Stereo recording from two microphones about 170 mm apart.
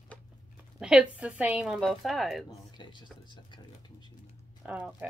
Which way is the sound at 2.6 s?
25° left (ahead or behind).